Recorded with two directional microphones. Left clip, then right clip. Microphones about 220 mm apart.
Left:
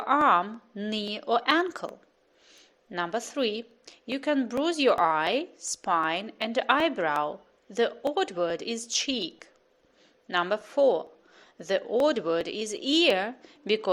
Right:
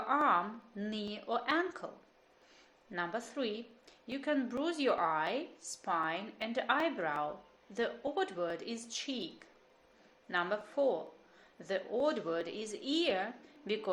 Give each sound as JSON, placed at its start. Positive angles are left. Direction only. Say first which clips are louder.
{"t": 0.1, "sound": "a woman's voice", "louder": "left 8 dB", "side_deg": 40}
{"t": 2.9, "sound": "a woman's voice", "louder": "left 8 dB", "side_deg": 40}